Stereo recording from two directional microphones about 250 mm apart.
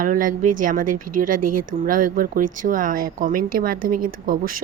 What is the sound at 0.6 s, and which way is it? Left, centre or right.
Speech, right.